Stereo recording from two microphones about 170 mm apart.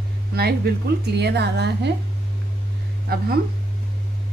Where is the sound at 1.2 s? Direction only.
80° right.